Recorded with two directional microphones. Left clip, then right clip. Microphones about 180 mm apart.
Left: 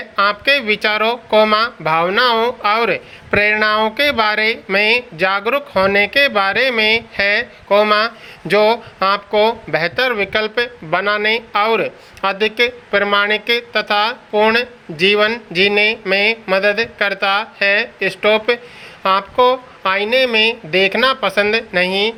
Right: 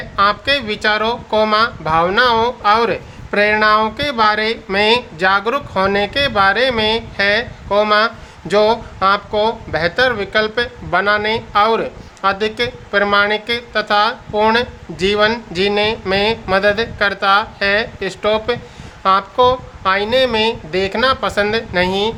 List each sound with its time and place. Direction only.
0.2 s speech: 10° left (ahead or behind)